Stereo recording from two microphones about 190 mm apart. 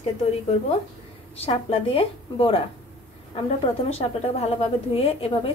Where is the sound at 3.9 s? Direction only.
35° left (ahead or behind).